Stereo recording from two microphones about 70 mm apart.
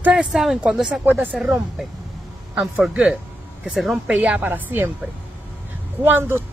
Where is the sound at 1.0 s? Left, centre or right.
Right.